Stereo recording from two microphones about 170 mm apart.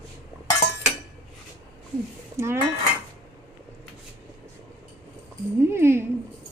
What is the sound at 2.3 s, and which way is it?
Dishes, 15° right (ahead or behind).